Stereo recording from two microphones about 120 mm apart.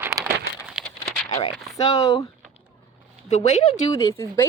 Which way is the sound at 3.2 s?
85° left.